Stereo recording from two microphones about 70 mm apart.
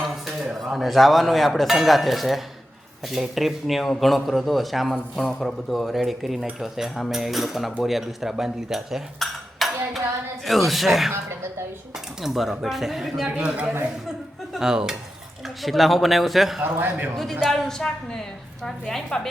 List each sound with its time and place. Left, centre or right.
0.0 s a man's voice: centre
12.2 s a man's voice: centre
13.2 s speech: centre
14.5 s dishes: centre
15.6 s a man's voice: centre
16.6 s a man's voice: right
17.5 s a woman's voice: centre